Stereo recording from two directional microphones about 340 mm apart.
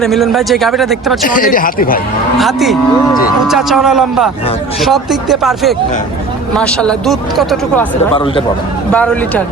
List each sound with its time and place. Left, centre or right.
0.0 s speech: centre
1.2 s a man's voice: left
2.4 s speech: centre
8.9 s speech: centre